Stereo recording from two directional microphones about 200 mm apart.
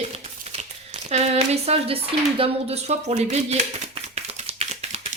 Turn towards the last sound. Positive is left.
turn(degrees=-30)  # may be behind; listen again after turning